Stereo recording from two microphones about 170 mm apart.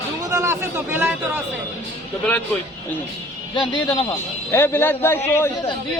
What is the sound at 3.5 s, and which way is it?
Speech, 30° left (ahead or behind).